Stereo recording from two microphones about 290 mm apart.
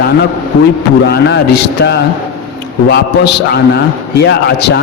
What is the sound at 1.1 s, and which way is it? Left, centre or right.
A man's voice, left.